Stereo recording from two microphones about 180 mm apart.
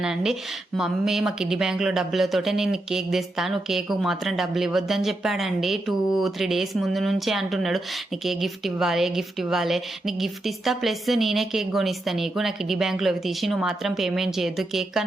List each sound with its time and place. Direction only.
0.0 s speech: 5° right (ahead or behind)